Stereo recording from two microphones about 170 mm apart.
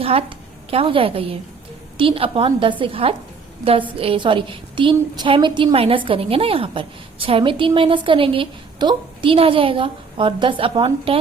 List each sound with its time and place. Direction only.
0.0 s a woman's voice: 35° right (ahead or behind)